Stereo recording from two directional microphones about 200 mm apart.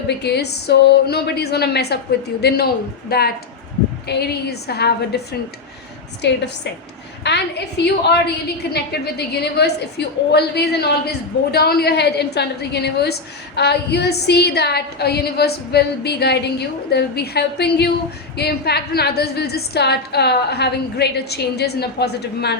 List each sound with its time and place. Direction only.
0.2 s a woman's voice: 55° left (ahead or behind)